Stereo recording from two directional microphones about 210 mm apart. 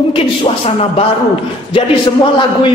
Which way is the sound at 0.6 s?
30° left (ahead or behind).